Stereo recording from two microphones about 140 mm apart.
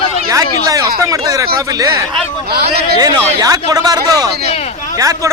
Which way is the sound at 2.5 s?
90° right.